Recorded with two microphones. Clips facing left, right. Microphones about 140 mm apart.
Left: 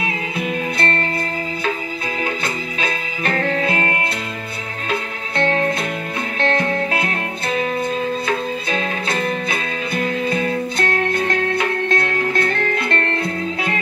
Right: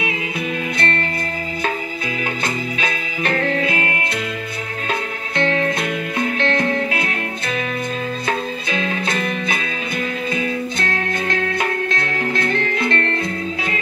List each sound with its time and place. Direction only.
2.8 s music: 35° left (ahead or behind)
5.4 s music: 40° left (ahead or behind)
8.6 s music: 35° left (ahead or behind)